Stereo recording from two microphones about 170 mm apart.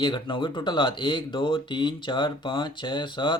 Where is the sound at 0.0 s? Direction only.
30° left (ahead or behind).